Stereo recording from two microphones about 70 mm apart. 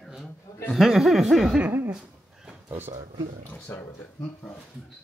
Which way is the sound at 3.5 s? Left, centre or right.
Left.